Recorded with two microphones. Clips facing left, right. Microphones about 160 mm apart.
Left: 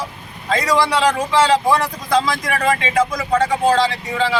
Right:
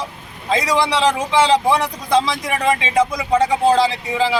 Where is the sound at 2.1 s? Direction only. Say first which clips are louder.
Right 1 dB; 20° right (ahead or behind).